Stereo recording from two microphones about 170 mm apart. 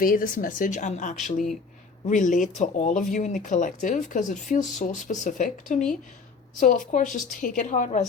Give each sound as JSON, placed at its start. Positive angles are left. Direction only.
{"t": 0.0, "sound": "speech", "side_deg": 55}